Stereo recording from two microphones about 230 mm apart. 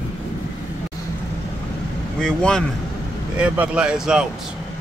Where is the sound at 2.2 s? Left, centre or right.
Centre.